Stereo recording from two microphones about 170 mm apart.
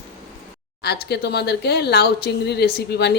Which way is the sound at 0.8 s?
75° left (ahead or behind).